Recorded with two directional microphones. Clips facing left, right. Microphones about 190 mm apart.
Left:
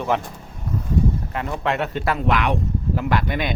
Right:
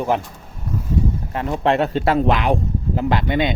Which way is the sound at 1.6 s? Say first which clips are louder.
Right 6 dB; 30° right (ahead or behind).